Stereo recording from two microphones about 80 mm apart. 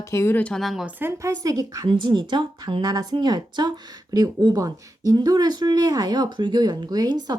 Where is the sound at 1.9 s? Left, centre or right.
Right.